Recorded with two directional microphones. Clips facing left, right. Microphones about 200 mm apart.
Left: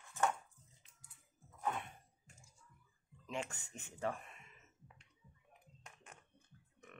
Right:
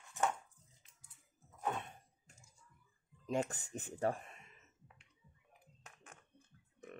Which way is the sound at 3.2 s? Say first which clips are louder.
Right 7 dB; 40° right (ahead or behind).